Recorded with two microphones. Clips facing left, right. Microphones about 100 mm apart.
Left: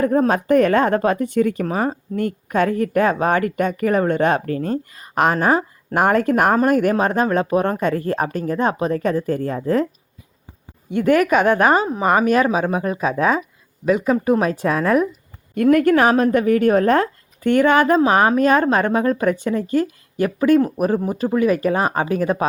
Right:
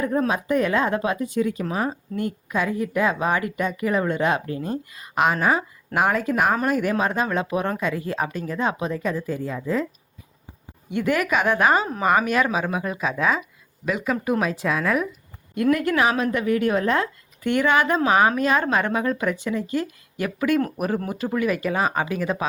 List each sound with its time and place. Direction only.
0.0 s speech: 45° left (ahead or behind)
4.9 s speech: 40° left (ahead or behind)
10.8 s a woman's voice: 40° left (ahead or behind)